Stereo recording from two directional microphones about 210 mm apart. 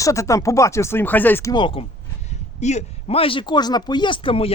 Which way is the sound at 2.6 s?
35° left (ahead or behind).